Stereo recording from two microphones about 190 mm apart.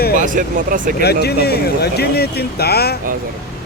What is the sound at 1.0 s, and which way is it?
Speech, 60° left (ahead or behind).